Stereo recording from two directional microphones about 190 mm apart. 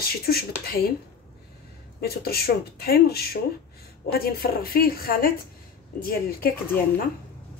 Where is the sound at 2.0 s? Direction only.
55° left (ahead or behind).